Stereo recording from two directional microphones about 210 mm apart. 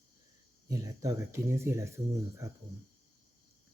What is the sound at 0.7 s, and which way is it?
Speech, 15° right (ahead or behind).